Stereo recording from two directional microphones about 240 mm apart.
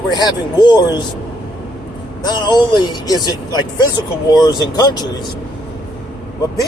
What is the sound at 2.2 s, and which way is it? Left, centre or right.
Speech, centre.